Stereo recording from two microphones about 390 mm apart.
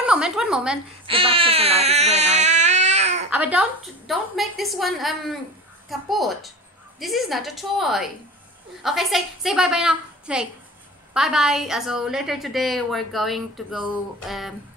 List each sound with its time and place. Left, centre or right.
0.0 s a woman's voice: centre
1.0 s speech: centre
3.3 s a woman's voice: centre